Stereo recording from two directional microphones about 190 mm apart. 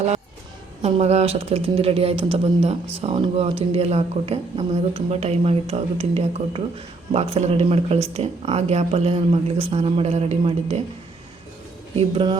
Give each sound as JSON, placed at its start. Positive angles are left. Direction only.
{"t": 0.8, "sound": "speech", "side_deg": -35}
{"t": 11.9, "sound": "speech", "side_deg": -25}